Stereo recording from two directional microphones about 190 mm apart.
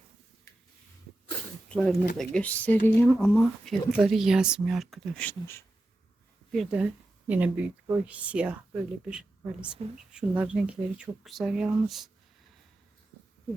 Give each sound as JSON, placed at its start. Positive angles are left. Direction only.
{"t": 1.7, "sound": "speech", "side_deg": 5}
{"t": 6.5, "sound": "speech", "side_deg": 0}